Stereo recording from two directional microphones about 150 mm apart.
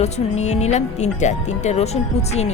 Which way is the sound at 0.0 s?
45° left (ahead or behind).